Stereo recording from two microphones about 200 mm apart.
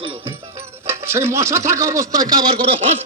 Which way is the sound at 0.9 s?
15° right (ahead or behind).